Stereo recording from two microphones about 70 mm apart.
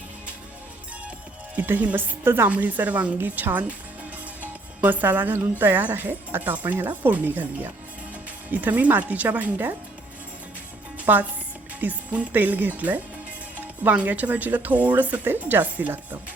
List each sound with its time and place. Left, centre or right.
1.5 s a woman's voice: right
2.5 s a woman's voice: right
4.8 s a woman's voice: right
11.0 s a woman's voice: right